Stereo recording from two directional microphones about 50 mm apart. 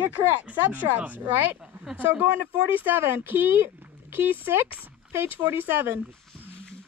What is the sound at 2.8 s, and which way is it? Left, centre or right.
Speech, right.